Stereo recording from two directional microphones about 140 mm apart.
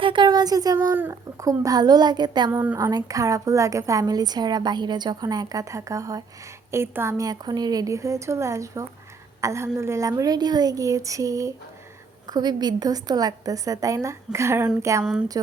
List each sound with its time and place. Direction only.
0.0 s a sound: 35° right (ahead or behind)
1.4 s a woman's voice: 25° right (ahead or behind)
2.5 s speech: 15° right (ahead or behind)
2.9 s a woman's voice: 25° right (ahead or behind)